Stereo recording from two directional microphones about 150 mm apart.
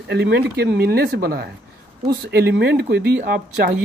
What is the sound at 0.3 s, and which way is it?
Speech, 90° right.